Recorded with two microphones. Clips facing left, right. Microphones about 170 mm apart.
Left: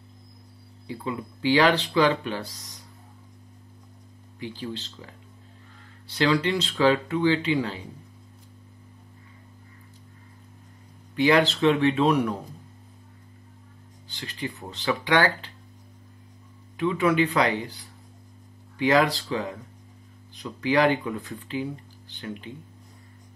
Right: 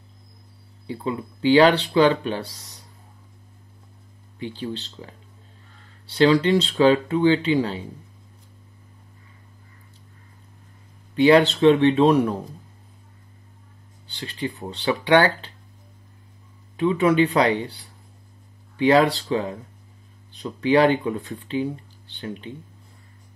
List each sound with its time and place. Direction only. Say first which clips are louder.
0.8 s speech: right 4 dB; 30° right (ahead or behind)
4.4 s speech: right 4 dB; 30° right (ahead or behind)
11.1 s speech: right 5 dB; 30° right (ahead or behind)
14.0 s speech: right 4 dB; 30° right (ahead or behind)
16.7 s speech: right 4 dB; 30° right (ahead or behind)
18.8 s speech: right 4 dB; 30° right (ahead or behind)